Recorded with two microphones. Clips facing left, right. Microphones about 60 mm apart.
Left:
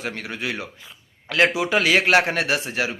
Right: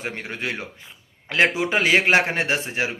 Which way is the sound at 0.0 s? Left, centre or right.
Right.